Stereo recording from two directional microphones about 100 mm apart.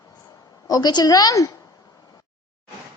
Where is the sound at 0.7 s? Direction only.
40° left (ahead or behind).